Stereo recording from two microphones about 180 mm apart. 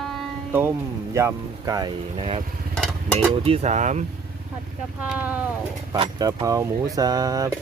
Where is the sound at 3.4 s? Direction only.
35° right (ahead or behind).